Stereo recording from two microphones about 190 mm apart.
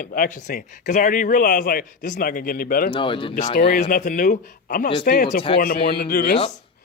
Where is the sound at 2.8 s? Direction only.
25° left (ahead or behind).